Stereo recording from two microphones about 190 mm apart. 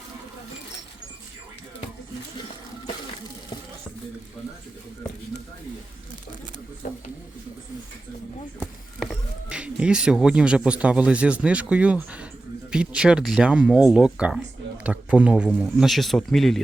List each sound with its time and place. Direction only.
6.8 s speech: 45° left (ahead or behind)
8.5 s speech: 5° left (ahead or behind)